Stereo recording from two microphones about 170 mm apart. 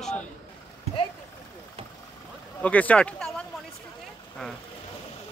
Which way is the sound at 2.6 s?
10° left (ahead or behind).